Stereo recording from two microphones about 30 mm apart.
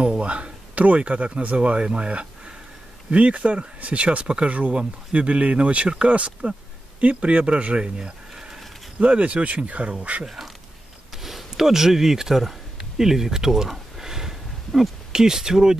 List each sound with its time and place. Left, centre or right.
0.2 s speech: right
0.7 s speech: right
8.0 s a sound: right
9.0 s speech: right
10.2 s speech: centre
13.7 s a sound: centre
14.8 s speech: centre